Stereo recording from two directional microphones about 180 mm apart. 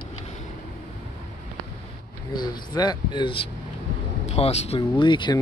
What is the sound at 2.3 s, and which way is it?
Speech, 25° left (ahead or behind).